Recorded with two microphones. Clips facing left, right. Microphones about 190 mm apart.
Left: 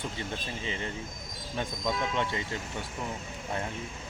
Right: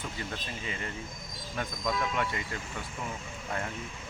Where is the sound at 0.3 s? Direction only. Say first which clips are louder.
Left 2 dB; 25° left (ahead or behind).